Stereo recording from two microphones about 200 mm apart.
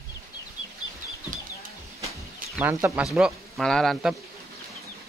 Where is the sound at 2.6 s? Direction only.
10° right (ahead or behind).